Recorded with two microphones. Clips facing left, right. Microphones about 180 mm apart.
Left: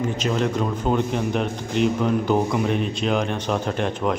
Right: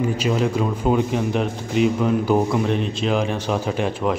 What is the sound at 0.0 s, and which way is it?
A man's voice, 10° right (ahead or behind).